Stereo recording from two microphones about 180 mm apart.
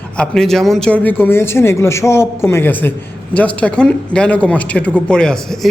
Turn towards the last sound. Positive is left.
turn(degrees=5)  # may be behind; listen again after turning